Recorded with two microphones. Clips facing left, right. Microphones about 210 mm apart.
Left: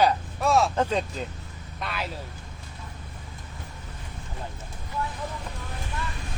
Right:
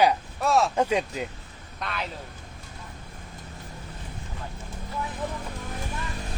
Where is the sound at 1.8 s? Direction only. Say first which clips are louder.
Even; centre (ahead or behind).